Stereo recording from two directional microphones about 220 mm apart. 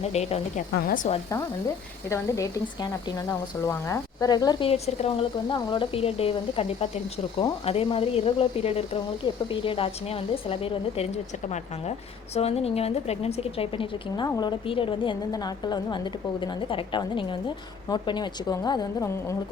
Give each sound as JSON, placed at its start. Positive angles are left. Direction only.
{"t": 0.0, "sound": "speech", "side_deg": 30}
{"t": 2.0, "sound": "speech", "side_deg": 15}